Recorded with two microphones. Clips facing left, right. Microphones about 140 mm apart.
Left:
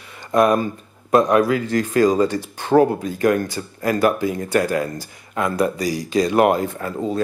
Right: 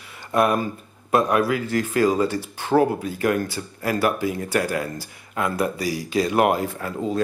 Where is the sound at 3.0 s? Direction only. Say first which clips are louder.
Left 4 dB; 5° right (ahead or behind).